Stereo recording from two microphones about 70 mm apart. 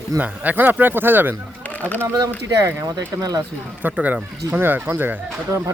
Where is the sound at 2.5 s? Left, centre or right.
Right.